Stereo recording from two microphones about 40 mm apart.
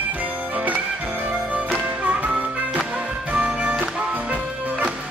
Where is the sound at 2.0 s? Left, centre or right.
Right.